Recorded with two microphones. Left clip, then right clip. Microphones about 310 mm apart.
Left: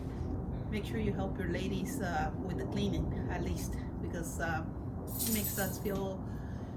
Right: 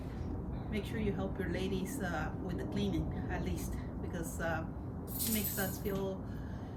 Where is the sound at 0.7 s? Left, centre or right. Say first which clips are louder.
Left 1 dB; centre.